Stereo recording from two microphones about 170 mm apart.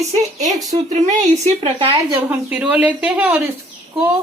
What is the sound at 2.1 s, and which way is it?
Speech, 10° right (ahead or behind).